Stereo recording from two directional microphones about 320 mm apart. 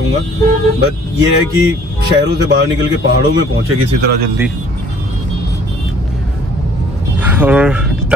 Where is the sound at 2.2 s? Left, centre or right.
Right.